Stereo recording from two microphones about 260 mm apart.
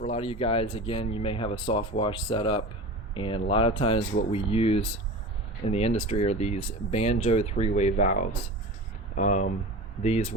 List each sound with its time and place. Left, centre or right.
0.0 s speech: left